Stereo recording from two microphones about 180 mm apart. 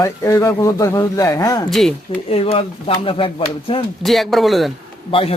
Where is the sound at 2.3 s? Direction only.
35° left (ahead or behind).